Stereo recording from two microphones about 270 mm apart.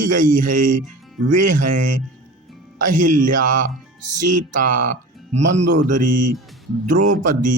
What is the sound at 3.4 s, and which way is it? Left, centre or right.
Speech, right.